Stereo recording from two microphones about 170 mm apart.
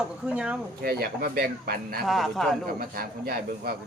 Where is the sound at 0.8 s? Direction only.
65° right (ahead or behind).